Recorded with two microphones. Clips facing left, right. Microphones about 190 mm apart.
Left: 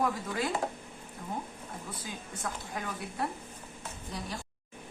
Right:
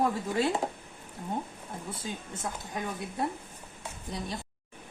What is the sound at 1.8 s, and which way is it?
Speech, 25° right (ahead or behind).